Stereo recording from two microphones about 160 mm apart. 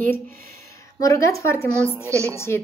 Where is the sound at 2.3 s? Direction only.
15° left (ahead or behind).